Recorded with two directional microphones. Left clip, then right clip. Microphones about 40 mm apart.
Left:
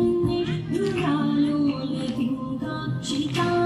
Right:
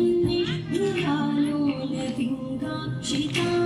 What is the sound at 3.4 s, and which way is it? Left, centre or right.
Music, right.